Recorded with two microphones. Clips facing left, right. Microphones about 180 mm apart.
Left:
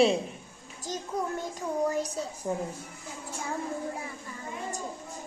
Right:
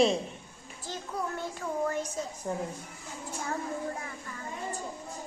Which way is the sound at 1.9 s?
35° left (ahead or behind).